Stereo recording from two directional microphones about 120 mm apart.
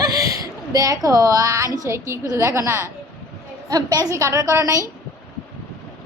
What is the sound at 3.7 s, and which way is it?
A woman's voice, 35° right (ahead or behind).